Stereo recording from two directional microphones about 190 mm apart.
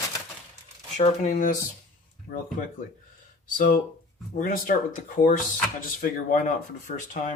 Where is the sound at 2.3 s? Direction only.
60° left (ahead or behind).